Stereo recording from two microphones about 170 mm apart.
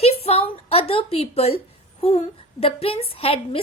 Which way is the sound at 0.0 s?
35° left (ahead or behind).